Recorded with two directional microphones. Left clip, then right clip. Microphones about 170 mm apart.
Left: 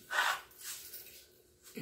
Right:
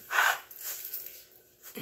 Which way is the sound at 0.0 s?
15° right (ahead or behind).